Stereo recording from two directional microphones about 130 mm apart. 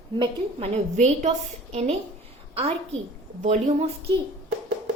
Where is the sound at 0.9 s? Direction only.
60° right (ahead or behind).